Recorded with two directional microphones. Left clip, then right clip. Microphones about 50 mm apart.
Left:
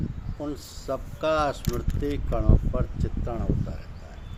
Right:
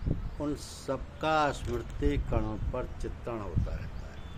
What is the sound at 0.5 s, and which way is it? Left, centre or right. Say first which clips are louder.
Speech: left 4 dB; centre.